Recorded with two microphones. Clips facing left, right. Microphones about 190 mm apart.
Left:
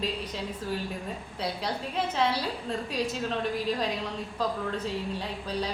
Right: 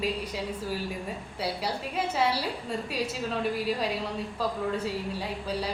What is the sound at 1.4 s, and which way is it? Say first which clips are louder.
A woman's voice: right 1 dB; 10° right (ahead or behind).